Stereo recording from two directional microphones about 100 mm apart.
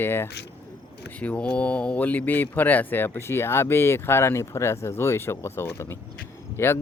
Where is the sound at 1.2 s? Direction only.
10° left (ahead or behind).